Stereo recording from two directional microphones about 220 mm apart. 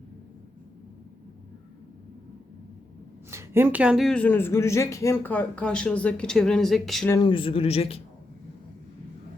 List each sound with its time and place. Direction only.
3.2 s speech: 10° right (ahead or behind)
7.1 s speech: 20° left (ahead or behind)